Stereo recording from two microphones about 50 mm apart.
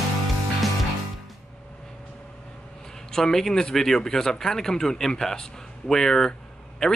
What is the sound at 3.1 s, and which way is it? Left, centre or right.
Speech, centre.